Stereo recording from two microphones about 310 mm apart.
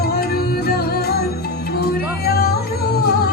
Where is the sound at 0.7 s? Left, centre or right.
Left.